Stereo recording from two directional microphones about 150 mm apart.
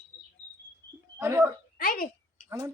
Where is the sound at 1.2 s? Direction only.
20° right (ahead or behind).